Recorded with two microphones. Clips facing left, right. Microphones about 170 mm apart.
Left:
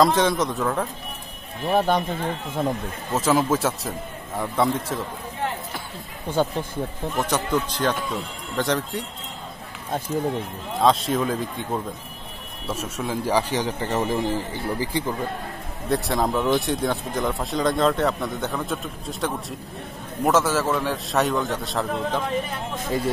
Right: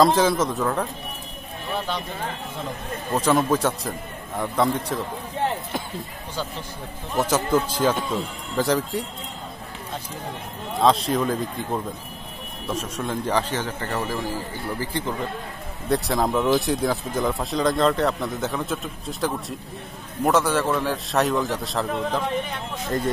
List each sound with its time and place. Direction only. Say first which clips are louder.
0.0 s speech: right 1 dB; centre (ahead or behind)
1.7 s speech: left 8 dB; 50° left (ahead or behind)
3.1 s speech: even; centre (ahead or behind)
6.4 s speech: left 9 dB; 55° left (ahead or behind)
7.2 s speech: right 3 dB; centre (ahead or behind)
10.7 s a man's voice: even; centre (ahead or behind); by 14.9 s 20° left (ahead or behind)
15.9 s speech: right 1 dB; centre (ahead or behind)